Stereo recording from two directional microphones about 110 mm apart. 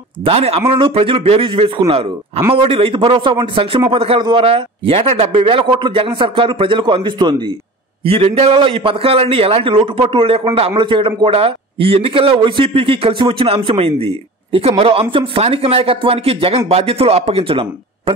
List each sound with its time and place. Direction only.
0.2 s a man's voice: 65° right (ahead or behind)
4.2 s a man's voice: 45° right (ahead or behind)
8.0 s a man's voice: 65° right (ahead or behind)
8.5 s a man's voice: 55° right (ahead or behind)